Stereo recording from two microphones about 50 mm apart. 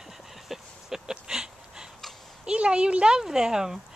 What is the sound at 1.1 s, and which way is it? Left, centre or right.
Dog, centre.